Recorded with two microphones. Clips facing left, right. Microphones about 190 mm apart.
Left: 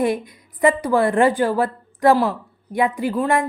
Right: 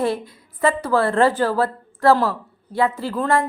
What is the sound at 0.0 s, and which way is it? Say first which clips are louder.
A woman's voice: left 2 dB; 15° left (ahead or behind).